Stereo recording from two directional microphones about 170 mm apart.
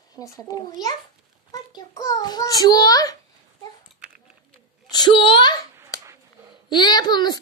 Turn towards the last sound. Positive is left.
turn(degrees=25)  # may be behind; listen again after turning